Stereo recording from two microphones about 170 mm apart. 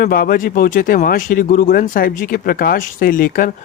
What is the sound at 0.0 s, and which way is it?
Speech, 55° left (ahead or behind).